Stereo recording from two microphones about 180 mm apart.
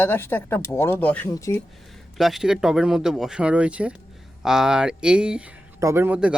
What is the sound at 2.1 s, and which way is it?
Speech, centre (ahead or behind).